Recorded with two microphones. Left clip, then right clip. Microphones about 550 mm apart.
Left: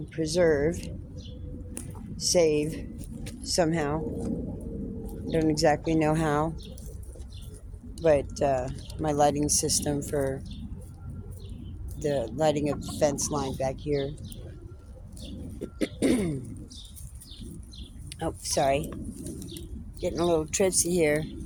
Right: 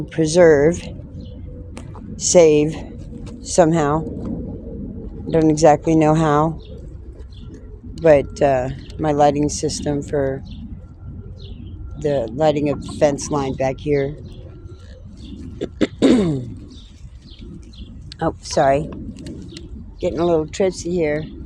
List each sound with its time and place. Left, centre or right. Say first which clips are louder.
0.1 s speech: right 12 dB; centre
2.1 s speech: right 11 dB; centre
5.3 s speech: right 11 dB; left
7.9 s speech: right 10 dB; left
11.9 s speech: right 8 dB; left
15.5 s throat clearing: right 11 dB; left
18.1 s speech: right 9 dB; left